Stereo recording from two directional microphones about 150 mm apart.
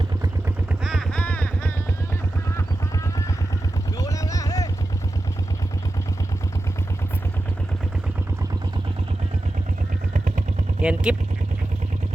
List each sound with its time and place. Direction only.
0.9 s a sound: 5° left (ahead or behind)
3.9 s boat: 20° left (ahead or behind)
10.8 s speech: 5° right (ahead or behind)